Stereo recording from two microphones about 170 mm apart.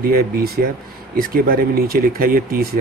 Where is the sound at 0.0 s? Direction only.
60° right (ahead or behind).